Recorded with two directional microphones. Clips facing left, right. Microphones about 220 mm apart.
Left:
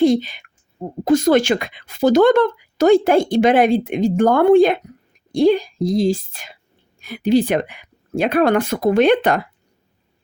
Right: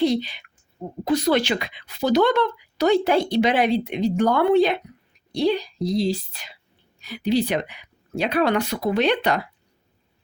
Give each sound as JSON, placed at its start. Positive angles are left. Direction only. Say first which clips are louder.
{"t": 0.0, "sound": "a woman's voice", "louder": "left 6 dB", "side_deg": 50}